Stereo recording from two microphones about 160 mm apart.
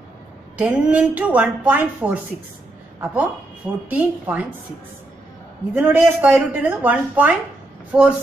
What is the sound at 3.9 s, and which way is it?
Speech, 10° right (ahead or behind).